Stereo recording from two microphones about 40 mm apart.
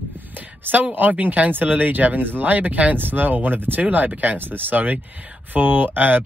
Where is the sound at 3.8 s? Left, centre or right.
Right.